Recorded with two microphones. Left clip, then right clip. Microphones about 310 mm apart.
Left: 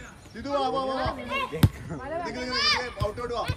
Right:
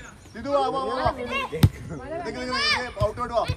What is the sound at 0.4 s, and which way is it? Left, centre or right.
A man's voice, centre.